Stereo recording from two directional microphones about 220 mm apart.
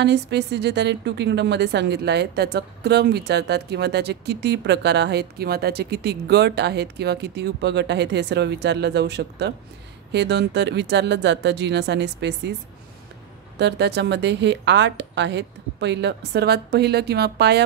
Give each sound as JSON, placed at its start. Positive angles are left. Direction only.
{"t": 0.0, "sound": "a woman's voice", "side_deg": -50}
{"t": 13.6, "sound": "a woman's voice", "side_deg": -50}